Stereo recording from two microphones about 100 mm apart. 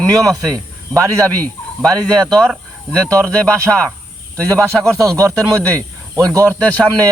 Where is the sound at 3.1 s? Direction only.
35° right (ahead or behind).